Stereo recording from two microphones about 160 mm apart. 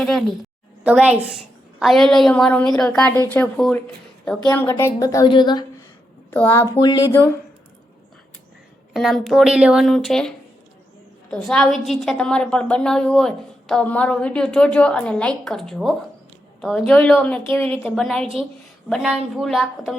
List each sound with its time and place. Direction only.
0.0 s a woman's voice: centre (ahead or behind)
4.5 s a woman's voice: 15° left (ahead or behind)
6.3 s a woman's voice: 15° left (ahead or behind)
8.9 s a woman's voice: centre (ahead or behind)